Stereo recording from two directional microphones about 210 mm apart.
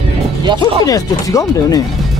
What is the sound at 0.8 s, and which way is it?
Speech, 15° left (ahead or behind).